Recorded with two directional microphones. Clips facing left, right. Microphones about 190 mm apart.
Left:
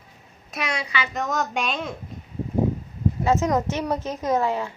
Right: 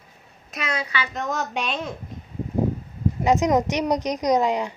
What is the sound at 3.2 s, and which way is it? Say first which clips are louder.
A woman's voice: right 3 dB; 15° right (ahead or behind).